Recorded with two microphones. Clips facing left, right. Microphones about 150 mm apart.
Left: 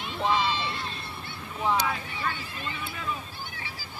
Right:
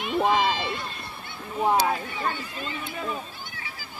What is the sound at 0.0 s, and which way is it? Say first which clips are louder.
Run: right 4 dB; 55° right (ahead or behind).